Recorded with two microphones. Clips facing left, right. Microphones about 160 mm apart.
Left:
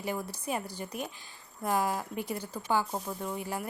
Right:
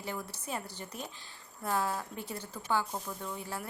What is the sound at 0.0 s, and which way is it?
A woman's voice, 10° left (ahead or behind).